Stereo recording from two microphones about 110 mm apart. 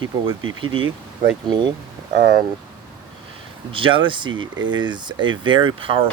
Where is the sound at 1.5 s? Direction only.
40° right (ahead or behind).